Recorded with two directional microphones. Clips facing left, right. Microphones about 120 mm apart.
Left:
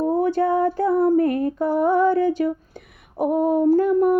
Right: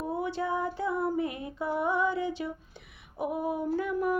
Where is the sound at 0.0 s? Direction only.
50° left (ahead or behind).